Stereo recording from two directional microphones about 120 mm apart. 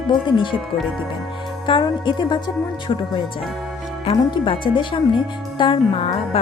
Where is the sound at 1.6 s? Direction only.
40° left (ahead or behind).